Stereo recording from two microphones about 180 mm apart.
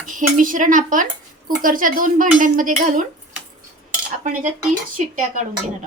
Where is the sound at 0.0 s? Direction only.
45° right (ahead or behind).